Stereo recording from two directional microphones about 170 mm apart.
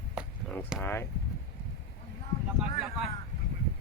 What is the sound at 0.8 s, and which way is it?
Speech, 10° left (ahead or behind).